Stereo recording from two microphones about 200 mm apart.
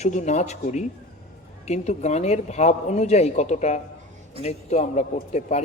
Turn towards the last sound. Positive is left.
turn(degrees=35)  # may be behind; listen again after turning